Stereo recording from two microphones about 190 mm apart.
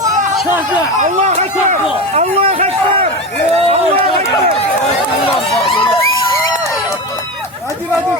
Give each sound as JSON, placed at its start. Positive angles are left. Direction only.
{"t": 0.9, "sound": "a man's voice", "side_deg": -40}
{"t": 5.2, "sound": "run", "side_deg": 30}